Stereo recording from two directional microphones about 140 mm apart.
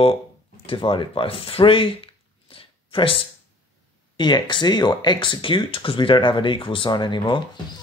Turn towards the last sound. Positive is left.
turn(degrees=35)  # may be behind; listen again after turning